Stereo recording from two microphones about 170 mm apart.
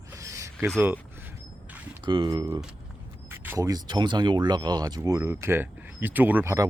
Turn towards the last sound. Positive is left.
turn(degrees=-15)  # may be behind; listen again after turning